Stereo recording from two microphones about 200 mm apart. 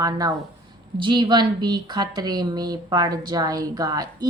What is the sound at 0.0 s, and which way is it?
A woman's voice, 20° right (ahead or behind).